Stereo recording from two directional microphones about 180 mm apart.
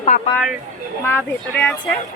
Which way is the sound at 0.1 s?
50° left (ahead or behind).